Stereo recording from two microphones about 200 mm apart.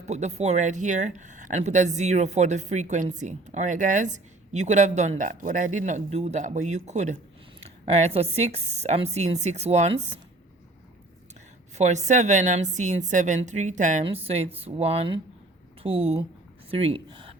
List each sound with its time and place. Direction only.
0.0 s speech: 35° right (ahead or behind)
11.8 s speech: 35° right (ahead or behind)